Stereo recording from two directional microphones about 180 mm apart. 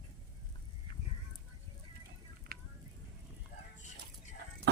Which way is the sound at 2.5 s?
60° right (ahead or behind).